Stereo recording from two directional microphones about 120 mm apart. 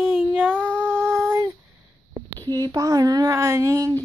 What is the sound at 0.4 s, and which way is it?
Child singing, 15° right (ahead or behind).